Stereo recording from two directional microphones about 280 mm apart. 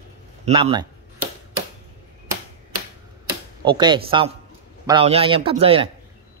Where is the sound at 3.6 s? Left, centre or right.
Centre.